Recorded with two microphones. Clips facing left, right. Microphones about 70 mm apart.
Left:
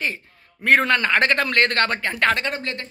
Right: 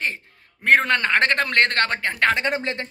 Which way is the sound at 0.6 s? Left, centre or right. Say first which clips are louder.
Even; right.